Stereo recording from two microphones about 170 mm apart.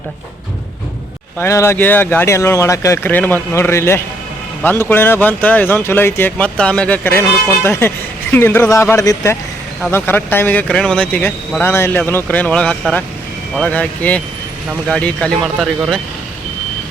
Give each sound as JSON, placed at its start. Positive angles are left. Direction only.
{"t": 1.4, "sound": "speech", "side_deg": 15}